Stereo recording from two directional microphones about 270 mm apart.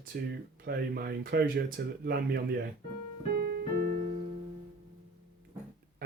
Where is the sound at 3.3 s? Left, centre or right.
Right.